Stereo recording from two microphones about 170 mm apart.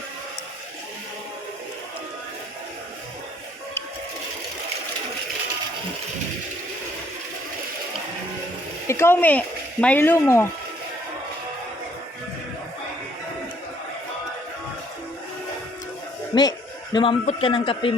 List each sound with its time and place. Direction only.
8.9 s speech: 15° left (ahead or behind)
16.3 s a man's voice: 25° left (ahead or behind)